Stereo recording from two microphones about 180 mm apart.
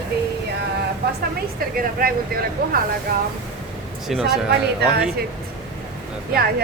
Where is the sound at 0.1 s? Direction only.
60° right (ahead or behind).